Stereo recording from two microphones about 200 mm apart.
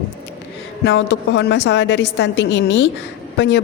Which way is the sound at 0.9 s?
60° left (ahead or behind).